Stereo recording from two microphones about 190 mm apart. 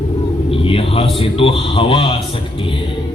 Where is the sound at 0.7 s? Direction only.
30° left (ahead or behind).